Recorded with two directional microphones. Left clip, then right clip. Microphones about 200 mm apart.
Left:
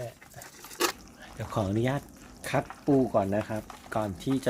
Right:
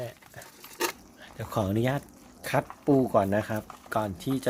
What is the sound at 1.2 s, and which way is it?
Speech, 20° right (ahead or behind).